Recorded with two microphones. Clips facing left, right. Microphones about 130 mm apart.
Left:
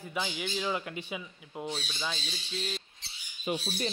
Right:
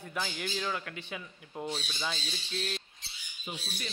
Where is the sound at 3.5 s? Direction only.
65° left (ahead or behind).